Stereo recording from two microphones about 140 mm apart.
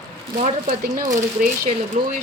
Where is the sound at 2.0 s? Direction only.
65° right (ahead or behind).